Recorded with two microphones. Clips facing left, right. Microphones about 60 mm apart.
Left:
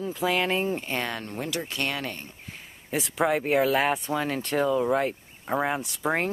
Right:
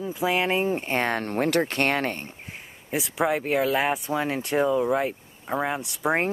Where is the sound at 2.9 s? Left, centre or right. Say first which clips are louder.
Even; centre.